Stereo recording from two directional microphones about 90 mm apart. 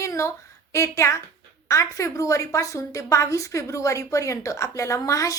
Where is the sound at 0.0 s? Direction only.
35° left (ahead or behind).